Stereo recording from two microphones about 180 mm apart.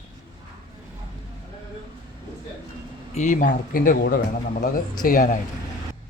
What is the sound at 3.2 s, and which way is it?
Speech, 45° left (ahead or behind).